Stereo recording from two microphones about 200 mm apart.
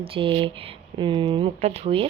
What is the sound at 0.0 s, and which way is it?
A woman's voice, 25° right (ahead or behind).